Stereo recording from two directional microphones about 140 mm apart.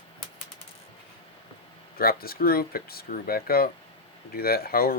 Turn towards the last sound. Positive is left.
turn(degrees=90)